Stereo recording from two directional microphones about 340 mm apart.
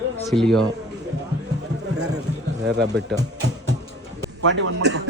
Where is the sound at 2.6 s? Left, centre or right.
Right.